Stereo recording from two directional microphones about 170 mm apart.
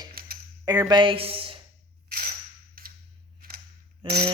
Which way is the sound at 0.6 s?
20° right (ahead or behind).